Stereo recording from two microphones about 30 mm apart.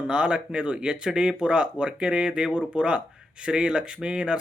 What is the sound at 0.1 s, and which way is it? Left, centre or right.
Speech, right.